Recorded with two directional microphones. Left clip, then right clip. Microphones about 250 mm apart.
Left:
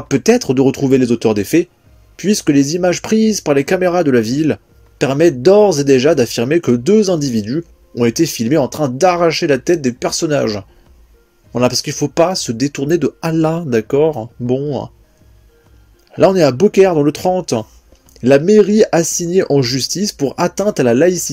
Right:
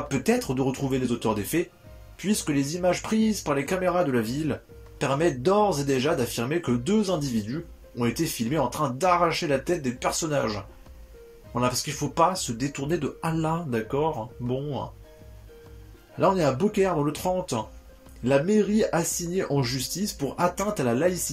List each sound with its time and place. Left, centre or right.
0.1 s speech: left
16.2 s speech: left